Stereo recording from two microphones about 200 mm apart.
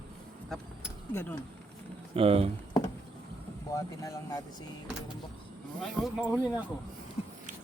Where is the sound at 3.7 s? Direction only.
15° left (ahead or behind).